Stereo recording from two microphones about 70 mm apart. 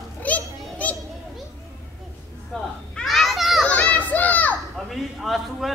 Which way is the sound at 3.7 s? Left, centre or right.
Left.